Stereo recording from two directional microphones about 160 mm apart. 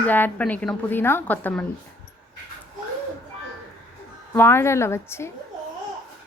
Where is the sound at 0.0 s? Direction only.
10° left (ahead or behind).